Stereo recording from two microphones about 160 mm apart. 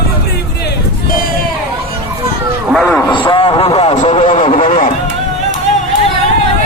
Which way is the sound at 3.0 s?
30° left (ahead or behind).